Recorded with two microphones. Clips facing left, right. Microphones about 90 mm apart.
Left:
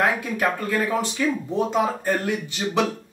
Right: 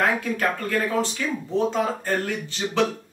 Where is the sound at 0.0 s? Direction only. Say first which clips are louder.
Left 1 dB; 15° left (ahead or behind).